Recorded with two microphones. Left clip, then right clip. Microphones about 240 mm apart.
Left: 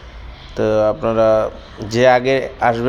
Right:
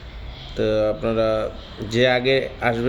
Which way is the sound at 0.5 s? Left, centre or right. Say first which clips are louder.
Left 5 dB; centre.